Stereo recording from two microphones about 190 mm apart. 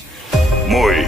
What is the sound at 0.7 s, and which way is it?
Music, centre (ahead or behind).